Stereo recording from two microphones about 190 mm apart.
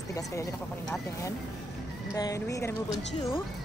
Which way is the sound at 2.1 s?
20° left (ahead or behind).